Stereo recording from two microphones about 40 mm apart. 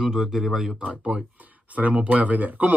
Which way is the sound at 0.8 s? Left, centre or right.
Right.